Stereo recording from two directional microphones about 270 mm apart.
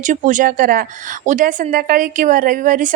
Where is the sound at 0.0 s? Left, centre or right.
Right.